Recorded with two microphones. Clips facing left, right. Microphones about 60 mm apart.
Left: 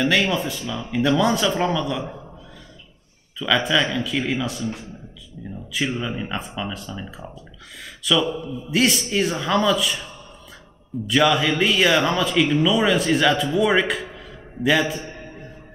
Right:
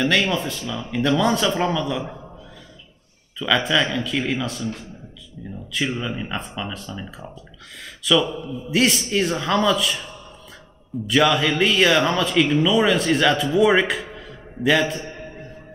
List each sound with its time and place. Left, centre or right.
0.3 s speech: centre
3.3 s speech: centre
5.4 s a sound: centre
5.9 s speech: centre
11.1 s a man's voice: centre